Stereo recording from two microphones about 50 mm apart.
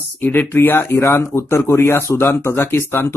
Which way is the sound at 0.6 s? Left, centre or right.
Left.